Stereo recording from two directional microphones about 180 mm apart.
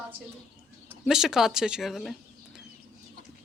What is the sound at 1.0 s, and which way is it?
Speech, centre (ahead or behind).